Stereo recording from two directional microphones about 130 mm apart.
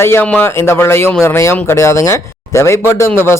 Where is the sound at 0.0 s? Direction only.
20° left (ahead or behind).